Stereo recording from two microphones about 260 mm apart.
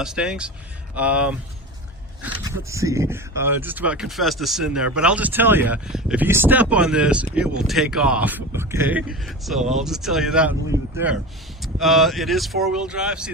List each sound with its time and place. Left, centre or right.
0.0 s speech: centre